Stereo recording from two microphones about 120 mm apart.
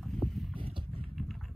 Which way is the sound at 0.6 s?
45° right (ahead or behind).